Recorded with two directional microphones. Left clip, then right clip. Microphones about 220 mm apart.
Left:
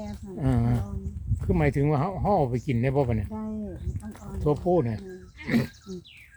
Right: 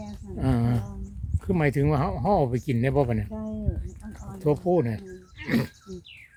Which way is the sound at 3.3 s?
10° left (ahead or behind).